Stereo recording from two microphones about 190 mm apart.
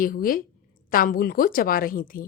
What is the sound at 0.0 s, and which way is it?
A woman's voice, 50° left (ahead or behind).